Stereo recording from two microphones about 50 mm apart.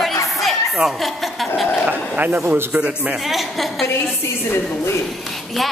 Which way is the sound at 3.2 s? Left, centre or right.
Centre.